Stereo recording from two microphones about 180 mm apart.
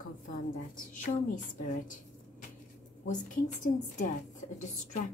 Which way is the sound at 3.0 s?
45° left (ahead or behind).